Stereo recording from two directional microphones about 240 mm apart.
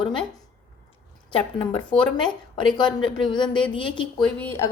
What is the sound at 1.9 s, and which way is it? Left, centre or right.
Speech, centre.